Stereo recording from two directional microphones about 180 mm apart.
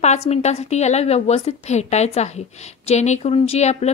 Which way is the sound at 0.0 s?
35° left (ahead or behind).